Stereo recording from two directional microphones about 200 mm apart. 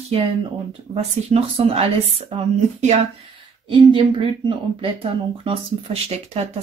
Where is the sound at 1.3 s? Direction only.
30° right (ahead or behind).